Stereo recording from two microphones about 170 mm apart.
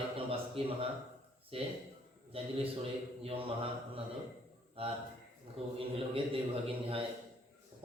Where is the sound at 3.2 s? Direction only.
35° right (ahead or behind).